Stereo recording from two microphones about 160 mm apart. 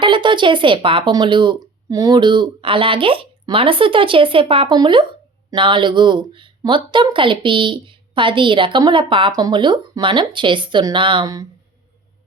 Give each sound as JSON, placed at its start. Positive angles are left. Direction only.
{"t": 0.0, "sound": "a woman's voice", "side_deg": -30}